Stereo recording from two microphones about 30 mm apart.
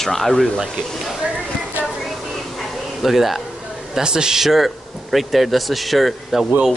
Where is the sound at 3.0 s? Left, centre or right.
Centre.